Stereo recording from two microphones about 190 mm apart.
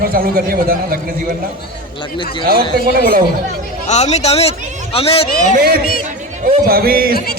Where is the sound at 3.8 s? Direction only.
35° left (ahead or behind).